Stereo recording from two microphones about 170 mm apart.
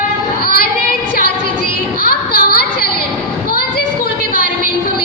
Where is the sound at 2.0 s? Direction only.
60° left (ahead or behind).